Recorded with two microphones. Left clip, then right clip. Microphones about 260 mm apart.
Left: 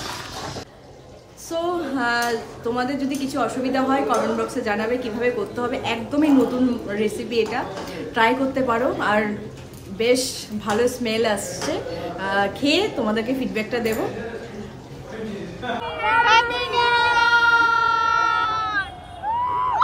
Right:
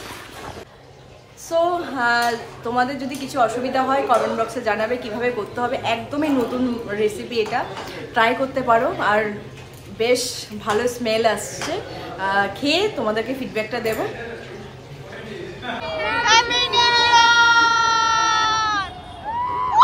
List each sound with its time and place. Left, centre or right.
1.5 s a woman's voice: centre
15.9 s chatter: centre
16.3 s child singing: centre
19.5 s a sound: left